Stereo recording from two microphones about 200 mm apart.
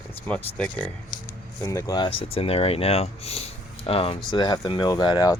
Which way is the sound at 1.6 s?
20° left (ahead or behind).